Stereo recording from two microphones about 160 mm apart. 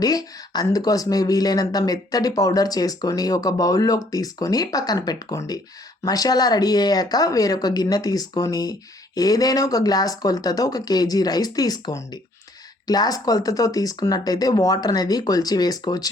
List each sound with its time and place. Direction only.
0.0 s speech: 25° left (ahead or behind)